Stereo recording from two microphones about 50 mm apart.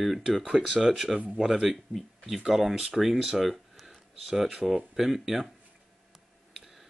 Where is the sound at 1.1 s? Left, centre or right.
Right.